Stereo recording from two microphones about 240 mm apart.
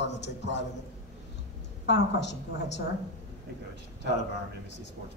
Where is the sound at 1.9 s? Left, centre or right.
Left.